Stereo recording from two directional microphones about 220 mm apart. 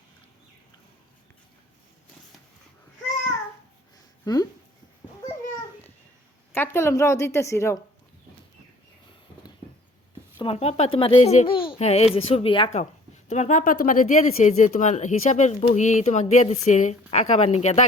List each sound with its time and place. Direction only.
4.3 s speech: 20° left (ahead or behind)
6.5 s a woman's voice: 10° left (ahead or behind)
10.3 s a child's voice: 25° left (ahead or behind)